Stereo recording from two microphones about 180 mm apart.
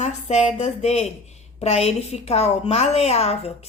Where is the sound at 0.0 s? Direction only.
40° left (ahead or behind).